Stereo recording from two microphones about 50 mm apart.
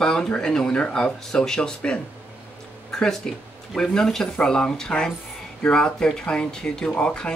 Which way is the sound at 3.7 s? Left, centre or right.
Centre.